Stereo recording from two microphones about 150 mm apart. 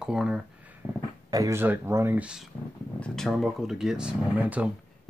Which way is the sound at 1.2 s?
20° right (ahead or behind).